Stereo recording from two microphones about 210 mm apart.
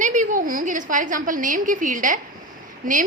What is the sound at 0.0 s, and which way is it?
A woman's voice, 35° right (ahead or behind).